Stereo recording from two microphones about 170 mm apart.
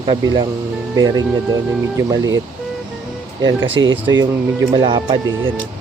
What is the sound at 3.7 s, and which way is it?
Speech, 90° right.